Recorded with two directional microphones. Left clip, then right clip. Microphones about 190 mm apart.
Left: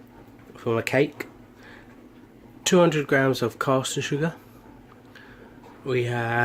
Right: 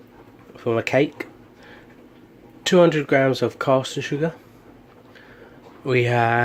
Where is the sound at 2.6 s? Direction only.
10° right (ahead or behind).